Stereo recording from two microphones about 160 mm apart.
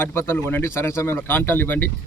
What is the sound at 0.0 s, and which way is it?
A man's voice, 15° left (ahead or behind).